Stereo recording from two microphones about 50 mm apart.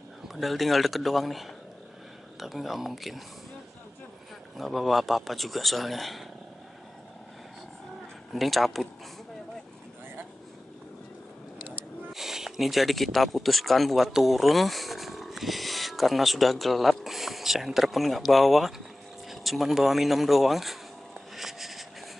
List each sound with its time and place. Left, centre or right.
0.3 s a man's voice: centre
4.6 s a man's voice: centre
8.3 s a man's voice: centre
12.1 s speech: centre
19.2 s a sound: centre